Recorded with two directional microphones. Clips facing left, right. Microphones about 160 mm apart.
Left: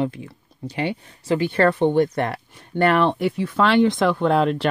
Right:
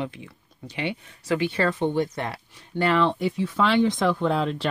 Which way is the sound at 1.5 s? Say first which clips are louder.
Left 6 dB; 60° left (ahead or behind).